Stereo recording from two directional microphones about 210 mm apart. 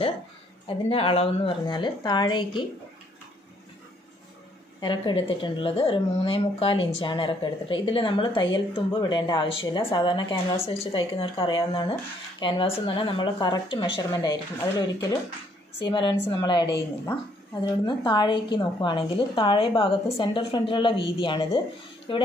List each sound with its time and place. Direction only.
0.7 s speech: 25° left (ahead or behind)
4.7 s speech: 20° left (ahead or behind)